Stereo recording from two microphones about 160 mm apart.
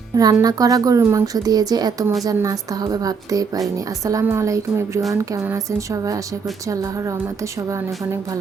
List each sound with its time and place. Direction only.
0.2 s a woman's voice: 25° right (ahead or behind)